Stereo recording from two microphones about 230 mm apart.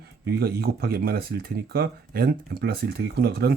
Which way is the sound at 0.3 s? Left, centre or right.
Right.